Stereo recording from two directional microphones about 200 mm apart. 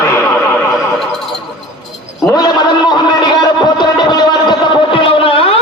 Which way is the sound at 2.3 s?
20° left (ahead or behind).